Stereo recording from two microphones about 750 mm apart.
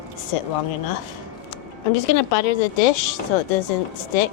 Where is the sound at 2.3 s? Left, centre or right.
Left.